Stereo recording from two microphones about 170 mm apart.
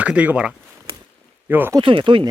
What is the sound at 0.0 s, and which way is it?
Speech, 10° right (ahead or behind).